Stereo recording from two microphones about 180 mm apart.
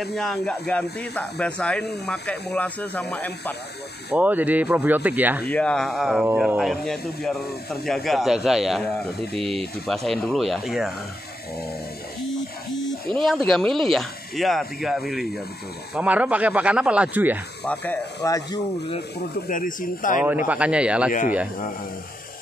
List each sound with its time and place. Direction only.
0.0 s speech: centre (ahead or behind)
4.1 s speech: 10° right (ahead or behind)
5.5 s speech: 5° left (ahead or behind)
13.1 s speech: centre (ahead or behind)
17.7 s speech: 5° left (ahead or behind)
18.2 s speech: 20° left (ahead or behind)
19.5 s speech: 50° left (ahead or behind)
20.2 s speech: 10° right (ahead or behind)